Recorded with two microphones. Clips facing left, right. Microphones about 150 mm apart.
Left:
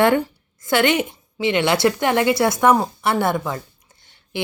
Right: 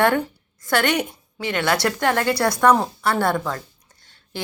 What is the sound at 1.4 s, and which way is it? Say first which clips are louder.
A woman's voice: left 4 dB; 20° left (ahead or behind).